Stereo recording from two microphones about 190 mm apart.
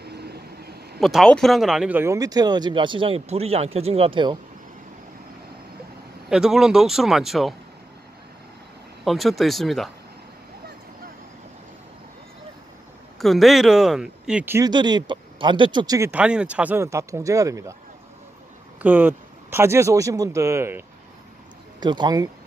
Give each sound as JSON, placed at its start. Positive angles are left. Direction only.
{"t": 0.0, "sound": "vehicle", "side_deg": -60}
{"t": 1.0, "sound": "speech", "side_deg": 0}
{"t": 6.2, "sound": "speech", "side_deg": 0}
{"t": 9.0, "sound": "speech", "side_deg": 0}
{"t": 13.2, "sound": "speech", "side_deg": 0}
{"t": 14.7, "sound": "speech", "side_deg": -25}
{"t": 16.1, "sound": "speech", "side_deg": -5}
{"t": 18.8, "sound": "speech", "side_deg": -10}